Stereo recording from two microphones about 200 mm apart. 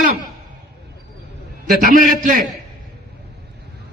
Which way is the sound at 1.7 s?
45° right (ahead or behind).